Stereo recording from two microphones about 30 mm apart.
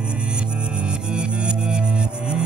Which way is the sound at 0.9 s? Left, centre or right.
Right.